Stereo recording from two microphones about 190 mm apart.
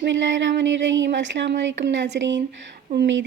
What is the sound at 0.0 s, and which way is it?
A woman's voice, 75° right (ahead or behind).